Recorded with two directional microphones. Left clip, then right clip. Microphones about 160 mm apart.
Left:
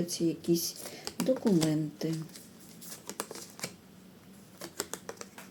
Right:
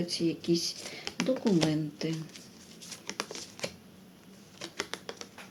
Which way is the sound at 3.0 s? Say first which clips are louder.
Right 3 dB; 10° left (ahead or behind).